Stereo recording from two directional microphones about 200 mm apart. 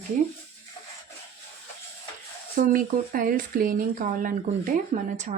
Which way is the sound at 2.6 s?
40° right (ahead or behind).